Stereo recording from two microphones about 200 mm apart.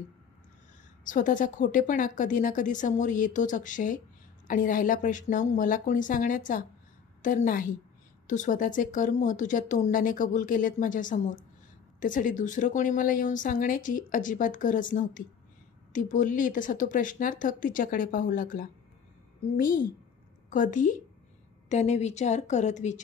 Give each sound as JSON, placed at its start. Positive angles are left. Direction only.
{"t": 1.0, "sound": "a woman's voice", "side_deg": 40}